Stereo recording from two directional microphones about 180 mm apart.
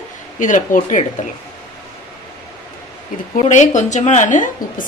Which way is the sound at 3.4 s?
40° left (ahead or behind).